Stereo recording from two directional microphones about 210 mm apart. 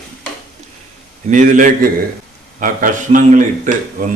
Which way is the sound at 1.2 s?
35° right (ahead or behind).